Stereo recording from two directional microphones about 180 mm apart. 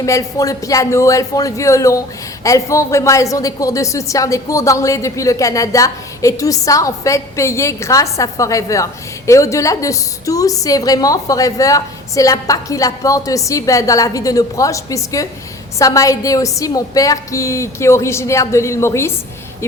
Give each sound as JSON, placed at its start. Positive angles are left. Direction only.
{"t": 0.0, "sound": "speech", "side_deg": 15}